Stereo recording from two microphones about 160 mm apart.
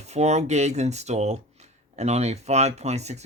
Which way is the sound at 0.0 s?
45° right (ahead or behind).